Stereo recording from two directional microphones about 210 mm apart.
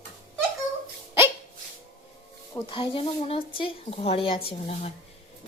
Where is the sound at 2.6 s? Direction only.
25° left (ahead or behind).